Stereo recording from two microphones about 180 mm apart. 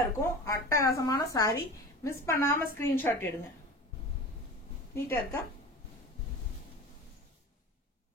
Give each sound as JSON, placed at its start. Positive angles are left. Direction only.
{"t": 0.2, "sound": "speech", "side_deg": 15}
{"t": 4.9, "sound": "speech", "side_deg": 15}